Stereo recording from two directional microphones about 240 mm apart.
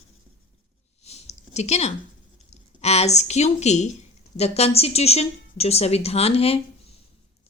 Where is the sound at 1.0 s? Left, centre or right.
Left.